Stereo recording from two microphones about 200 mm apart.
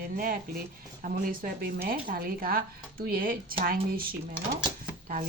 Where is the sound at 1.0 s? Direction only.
45° right (ahead or behind).